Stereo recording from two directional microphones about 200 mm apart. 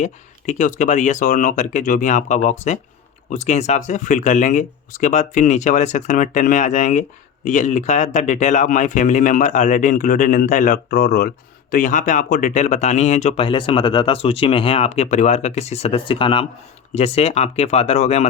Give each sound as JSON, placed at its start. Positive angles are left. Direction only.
{"t": 0.0, "sound": "speech", "side_deg": 35}